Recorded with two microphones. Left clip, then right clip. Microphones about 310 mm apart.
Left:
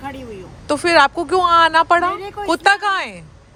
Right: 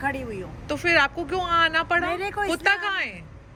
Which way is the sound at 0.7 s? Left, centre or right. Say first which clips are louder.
Left 8 dB; centre.